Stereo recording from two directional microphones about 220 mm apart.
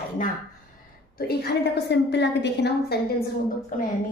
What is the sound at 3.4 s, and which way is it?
Speech, 35° left (ahead or behind).